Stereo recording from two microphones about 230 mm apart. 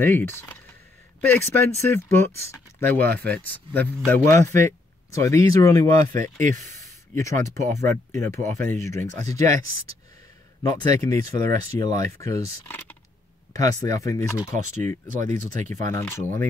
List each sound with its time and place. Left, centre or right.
0.0 s speech: centre
6.4 s speech: right
7.6 s speech: centre
10.8 s speech: centre
14.8 s speech: right
15.9 s speech: centre